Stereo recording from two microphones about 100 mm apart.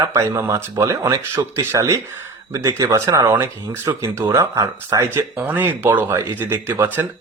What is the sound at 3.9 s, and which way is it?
Speech, 35° right (ahead or behind).